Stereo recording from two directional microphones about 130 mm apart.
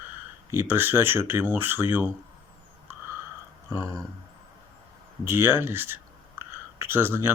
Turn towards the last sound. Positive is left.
turn(degrees=-15)  # may be behind; listen again after turning